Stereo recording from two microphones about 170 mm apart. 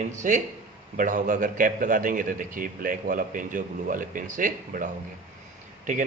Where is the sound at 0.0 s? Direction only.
45° right (ahead or behind).